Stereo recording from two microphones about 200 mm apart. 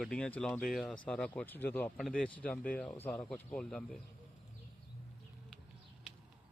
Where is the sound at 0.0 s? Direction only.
5° left (ahead or behind).